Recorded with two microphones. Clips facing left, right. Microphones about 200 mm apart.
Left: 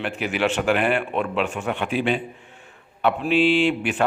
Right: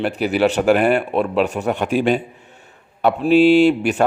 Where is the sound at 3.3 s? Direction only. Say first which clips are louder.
Right 8 dB; 40° right (ahead or behind).